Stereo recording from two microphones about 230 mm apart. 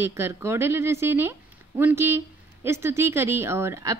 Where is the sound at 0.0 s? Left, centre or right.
Centre.